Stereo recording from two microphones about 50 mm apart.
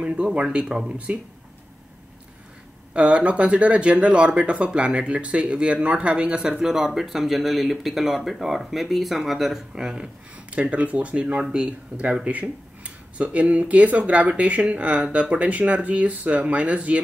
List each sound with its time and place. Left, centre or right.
0.0 s speech: right
2.9 s speech: right
10.5 s speech: right